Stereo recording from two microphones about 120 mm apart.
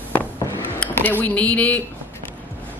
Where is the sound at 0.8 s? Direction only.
15° left (ahead or behind).